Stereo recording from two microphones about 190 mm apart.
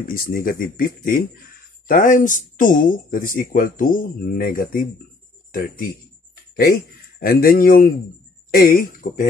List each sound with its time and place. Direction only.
0.0 s speech: 50° left (ahead or behind)